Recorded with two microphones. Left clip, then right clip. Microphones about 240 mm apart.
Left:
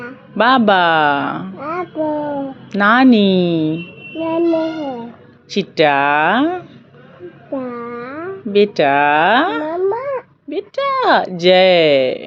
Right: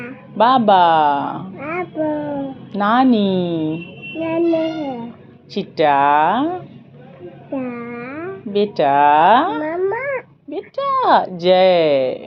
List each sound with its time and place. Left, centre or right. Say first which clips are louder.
0.3 s speech: even; left
1.5 s a sound: left 1 dB; centre
2.7 s speech: left 4 dB; left
4.3 s a child's voice: left 2 dB; left
5.5 s speech: left 2 dB; left
7.5 s a sound: left 2 dB; centre
8.5 s speech: left 2 dB; left
9.6 s cat: left 2 dB; left
10.5 s speech: left 1 dB; left